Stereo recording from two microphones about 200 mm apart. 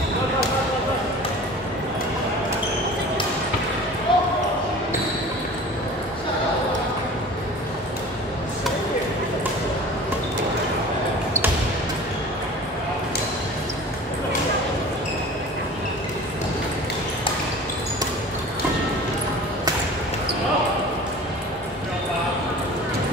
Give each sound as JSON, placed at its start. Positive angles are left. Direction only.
{"t": 4.1, "sound": "basketball bounce", "side_deg": 25}